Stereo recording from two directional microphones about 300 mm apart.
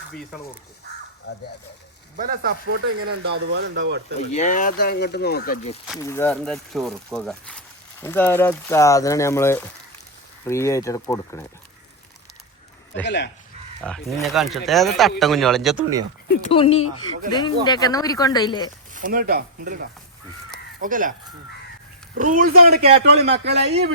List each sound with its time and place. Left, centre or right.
1.3 s speech: left
2.1 s speech: right
2.6 s speech: right
3.5 s a man's voice: right
4.2 s speech: left
6.0 s speech: centre
13.1 s speech: left
13.8 s speech: centre
16.3 s speech: left
18.9 s speech: right
22.2 s a man's voice: right